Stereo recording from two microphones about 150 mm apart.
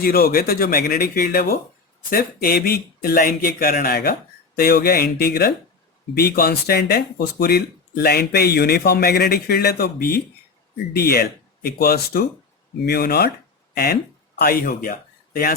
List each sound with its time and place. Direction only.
0.0 s speech: 85° left
4.5 s speech: 90° left; by 15.5 s 75° left (ahead or behind)